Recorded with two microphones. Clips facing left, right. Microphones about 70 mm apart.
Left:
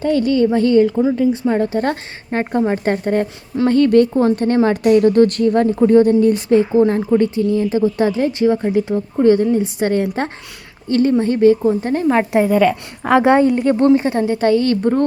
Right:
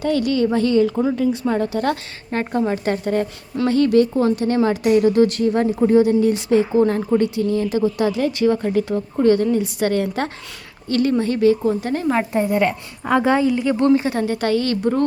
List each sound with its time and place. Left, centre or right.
0.0 s a woman's voice: left
4.1 s a woman's voice: left
12.3 s a woman's voice: left
13.1 s speech: left
13.7 s a woman's voice: left